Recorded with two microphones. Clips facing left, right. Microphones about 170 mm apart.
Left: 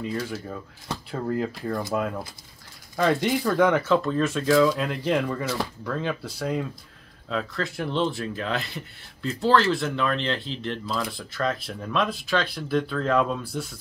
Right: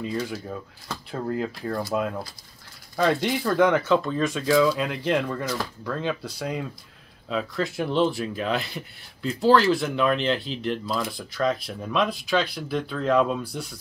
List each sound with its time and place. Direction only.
0.2 s speech: 5° right (ahead or behind)
7.2 s speech: 10° right (ahead or behind)